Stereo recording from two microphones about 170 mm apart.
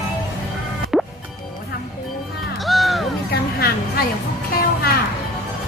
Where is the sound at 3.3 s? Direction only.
65° left (ahead or behind).